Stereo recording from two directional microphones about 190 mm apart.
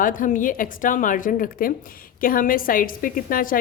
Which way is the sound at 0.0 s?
45° left (ahead or behind).